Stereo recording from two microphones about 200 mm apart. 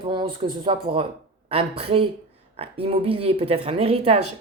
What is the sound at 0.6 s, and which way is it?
Speech, 25° right (ahead or behind).